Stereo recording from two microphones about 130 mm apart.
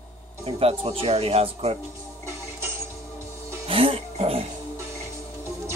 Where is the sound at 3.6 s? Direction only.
45° right (ahead or behind).